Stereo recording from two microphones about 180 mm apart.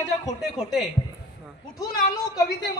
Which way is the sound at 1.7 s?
20° left (ahead or behind).